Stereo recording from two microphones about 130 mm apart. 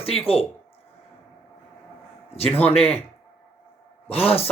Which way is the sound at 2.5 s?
10° left (ahead or behind).